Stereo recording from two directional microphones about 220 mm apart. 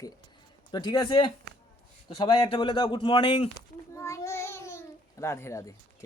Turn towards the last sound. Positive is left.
turn(degrees=15)  # may be behind; listen again after turning